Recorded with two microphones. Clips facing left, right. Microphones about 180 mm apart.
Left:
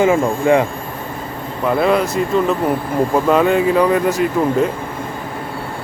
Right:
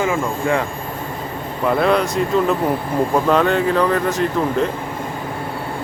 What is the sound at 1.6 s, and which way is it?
Speech, centre (ahead or behind).